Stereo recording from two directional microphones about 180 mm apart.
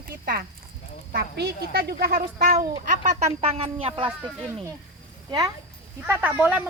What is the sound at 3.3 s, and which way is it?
Speech, 35° right (ahead or behind).